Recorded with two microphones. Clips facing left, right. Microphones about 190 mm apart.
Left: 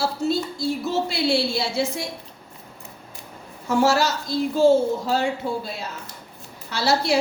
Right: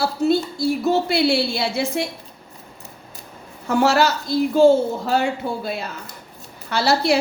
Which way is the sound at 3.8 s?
65° right (ahead or behind).